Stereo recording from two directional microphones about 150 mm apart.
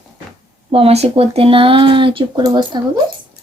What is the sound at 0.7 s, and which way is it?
Speech, 40° right (ahead or behind).